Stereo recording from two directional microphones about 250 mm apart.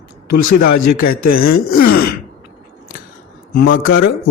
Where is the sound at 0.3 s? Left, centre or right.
Left.